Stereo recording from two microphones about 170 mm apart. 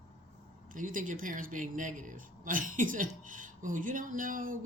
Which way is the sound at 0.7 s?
50° right (ahead or behind).